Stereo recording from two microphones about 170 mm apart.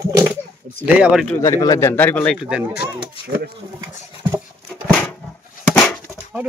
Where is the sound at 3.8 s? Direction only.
20° right (ahead or behind).